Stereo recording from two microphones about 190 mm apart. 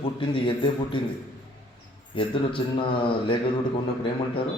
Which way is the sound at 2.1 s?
25° left (ahead or behind).